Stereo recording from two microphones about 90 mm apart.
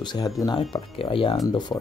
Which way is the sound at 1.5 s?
50° left (ahead or behind).